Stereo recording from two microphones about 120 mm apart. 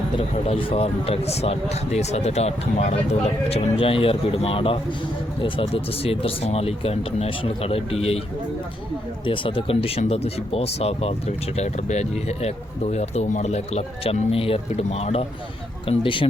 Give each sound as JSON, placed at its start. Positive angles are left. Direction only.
{"t": 0.2, "sound": "speech", "side_deg": 50}
{"t": 9.2, "sound": "speech", "side_deg": 45}
{"t": 15.9, "sound": "speech", "side_deg": 45}